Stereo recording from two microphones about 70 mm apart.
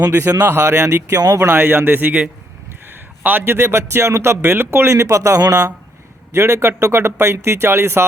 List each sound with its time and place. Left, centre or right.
0.2 s a man's voice: right
1.1 s speech: right
1.5 s a man's voice: right
6.3 s a man's voice: right